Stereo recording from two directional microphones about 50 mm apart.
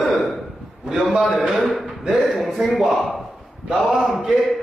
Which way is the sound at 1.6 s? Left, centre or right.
Centre.